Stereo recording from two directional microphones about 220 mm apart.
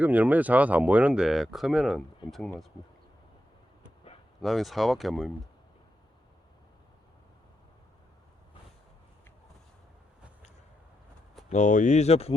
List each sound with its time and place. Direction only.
0.0 s speech: 5° right (ahead or behind)
4.4 s speech: centre (ahead or behind)
11.4 s speech: 35° left (ahead or behind)